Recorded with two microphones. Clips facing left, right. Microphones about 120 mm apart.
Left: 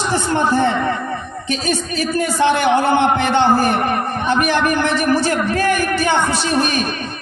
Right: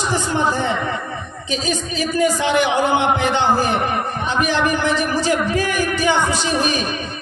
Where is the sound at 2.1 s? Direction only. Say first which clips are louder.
Even; 50° left (ahead or behind).